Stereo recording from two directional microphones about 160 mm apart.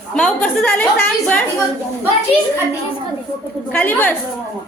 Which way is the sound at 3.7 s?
10° left (ahead or behind).